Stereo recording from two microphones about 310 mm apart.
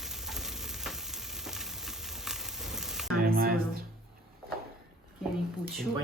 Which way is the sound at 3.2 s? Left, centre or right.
Right.